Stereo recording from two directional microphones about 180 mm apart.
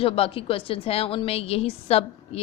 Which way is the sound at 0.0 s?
30° left (ahead or behind).